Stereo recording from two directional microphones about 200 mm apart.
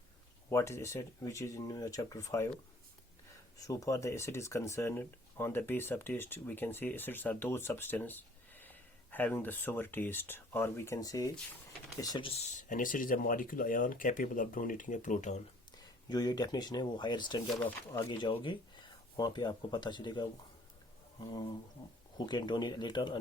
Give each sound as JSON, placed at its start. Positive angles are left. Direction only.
{"t": 0.5, "sound": "speech", "side_deg": 15}
{"t": 3.7, "sound": "speech", "side_deg": 15}
{"t": 16.0, "sound": "speech", "side_deg": 20}
{"t": 17.5, "sound": "speech", "side_deg": 10}
{"t": 18.0, "sound": "speech", "side_deg": 25}